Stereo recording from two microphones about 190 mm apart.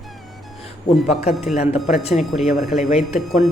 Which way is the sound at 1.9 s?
35° left (ahead or behind).